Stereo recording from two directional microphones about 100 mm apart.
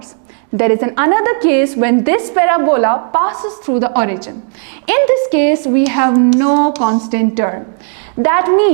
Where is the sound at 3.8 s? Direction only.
25° right (ahead or behind).